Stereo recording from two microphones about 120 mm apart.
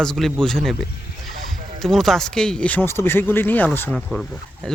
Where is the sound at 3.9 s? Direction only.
Centre (ahead or behind).